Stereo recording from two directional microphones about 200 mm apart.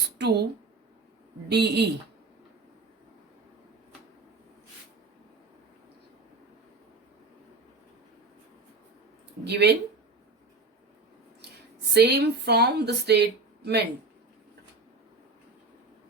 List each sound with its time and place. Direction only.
0.2 s speech: 55° right (ahead or behind)
1.5 s speech: 55° right (ahead or behind)
9.5 s speech: 55° right (ahead or behind)
11.9 s speech: 55° right (ahead or behind)